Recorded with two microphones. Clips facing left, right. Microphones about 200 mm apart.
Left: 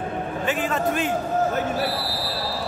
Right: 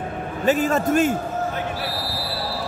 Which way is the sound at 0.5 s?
40° right (ahead or behind).